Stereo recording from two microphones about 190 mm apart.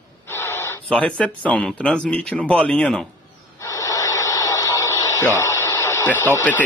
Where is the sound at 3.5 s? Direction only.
15° left (ahead or behind).